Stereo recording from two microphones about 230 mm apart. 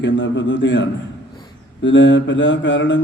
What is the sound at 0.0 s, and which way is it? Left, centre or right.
Speech, left.